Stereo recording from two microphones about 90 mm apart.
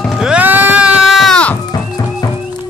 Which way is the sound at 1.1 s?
Centre (ahead or behind).